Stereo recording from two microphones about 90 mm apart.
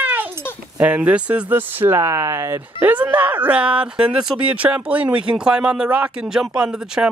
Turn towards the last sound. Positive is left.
turn(degrees=-10)  # may be behind; listen again after turning